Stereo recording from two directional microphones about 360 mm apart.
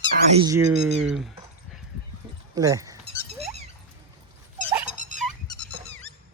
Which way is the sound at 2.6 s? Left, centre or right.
Centre.